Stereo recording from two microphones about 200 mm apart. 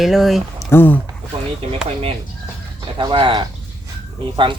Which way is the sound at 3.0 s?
25° right (ahead or behind).